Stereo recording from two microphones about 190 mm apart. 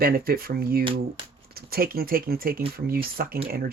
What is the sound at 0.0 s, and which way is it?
Speech, 55° right (ahead or behind).